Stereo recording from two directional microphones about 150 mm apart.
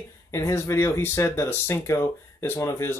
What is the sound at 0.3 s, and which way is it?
Speech, 20° left (ahead or behind).